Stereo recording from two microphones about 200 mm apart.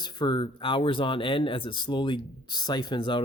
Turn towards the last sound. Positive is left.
turn(degrees=20)  # may be behind; listen again after turning